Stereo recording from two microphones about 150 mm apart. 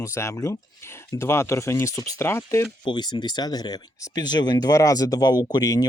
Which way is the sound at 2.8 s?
30° left (ahead or behind).